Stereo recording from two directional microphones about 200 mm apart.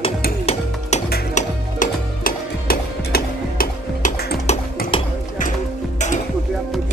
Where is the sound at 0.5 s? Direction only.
35° left (ahead or behind).